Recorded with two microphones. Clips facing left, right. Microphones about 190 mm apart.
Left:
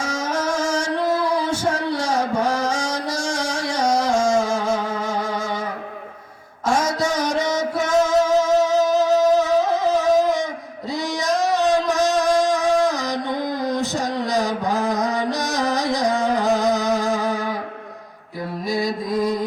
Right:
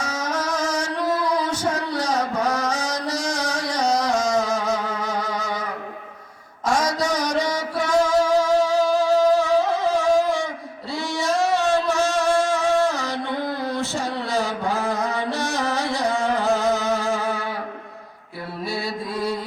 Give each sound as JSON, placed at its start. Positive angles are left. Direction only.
{"t": 0.3, "sound": "music", "side_deg": 10}
{"t": 7.3, "sound": "music", "side_deg": 25}
{"t": 18.7, "sound": "music", "side_deg": 15}